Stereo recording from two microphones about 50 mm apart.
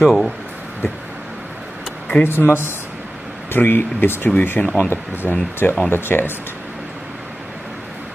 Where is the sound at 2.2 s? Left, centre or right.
Left.